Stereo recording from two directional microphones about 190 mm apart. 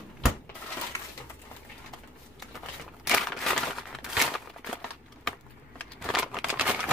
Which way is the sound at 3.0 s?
Centre (ahead or behind).